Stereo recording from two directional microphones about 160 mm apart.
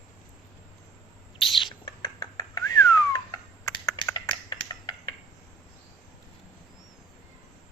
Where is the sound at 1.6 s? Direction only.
25° left (ahead or behind).